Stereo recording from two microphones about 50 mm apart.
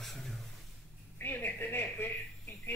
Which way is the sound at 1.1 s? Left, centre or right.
Left.